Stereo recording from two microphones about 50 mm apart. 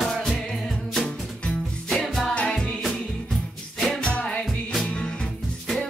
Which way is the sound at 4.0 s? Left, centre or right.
Left.